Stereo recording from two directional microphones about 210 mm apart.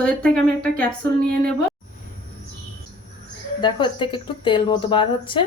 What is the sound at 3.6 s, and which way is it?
Speech, 20° left (ahead or behind).